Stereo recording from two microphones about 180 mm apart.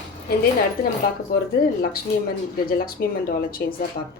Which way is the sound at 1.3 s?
55° left (ahead or behind).